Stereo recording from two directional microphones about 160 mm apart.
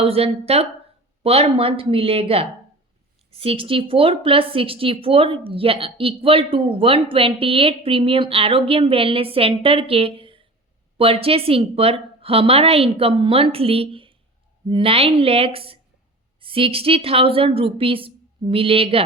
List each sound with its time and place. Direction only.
0.0 s a woman's voice: 35° right (ahead or behind)